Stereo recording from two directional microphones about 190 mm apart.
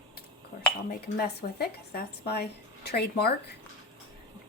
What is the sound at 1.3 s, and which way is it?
A woman's voice, 55° left (ahead or behind).